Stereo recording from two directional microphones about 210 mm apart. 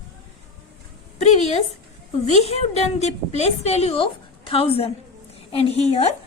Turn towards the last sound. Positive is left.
turn(degrees=30)  # may be behind; listen again after turning